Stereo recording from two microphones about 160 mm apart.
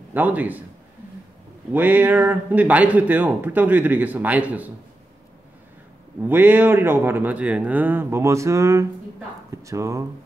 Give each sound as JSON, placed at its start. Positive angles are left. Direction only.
{"t": 0.1, "sound": "speech", "side_deg": -10}
{"t": 1.7, "sound": "speech", "side_deg": -10}
{"t": 6.2, "sound": "speech", "side_deg": -10}